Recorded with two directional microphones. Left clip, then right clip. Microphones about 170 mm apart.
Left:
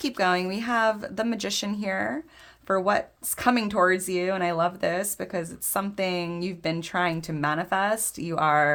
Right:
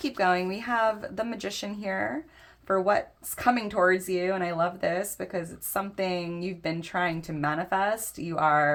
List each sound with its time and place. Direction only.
0.0 s speech: 35° left (ahead or behind)